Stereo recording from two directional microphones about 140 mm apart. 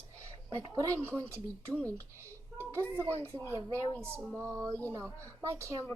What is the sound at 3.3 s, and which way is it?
A child's voice, 20° right (ahead or behind).